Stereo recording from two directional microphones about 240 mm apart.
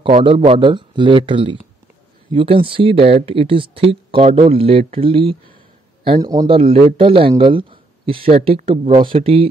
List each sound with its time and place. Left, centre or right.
0.0 s speech: right